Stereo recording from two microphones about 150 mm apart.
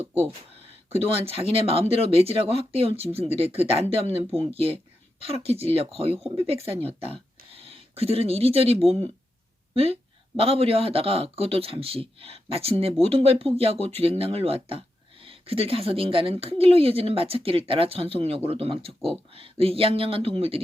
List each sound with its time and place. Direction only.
1.2 s speech: 40° right (ahead or behind)